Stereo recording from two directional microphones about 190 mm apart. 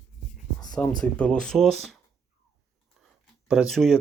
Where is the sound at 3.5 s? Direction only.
Centre (ahead or behind).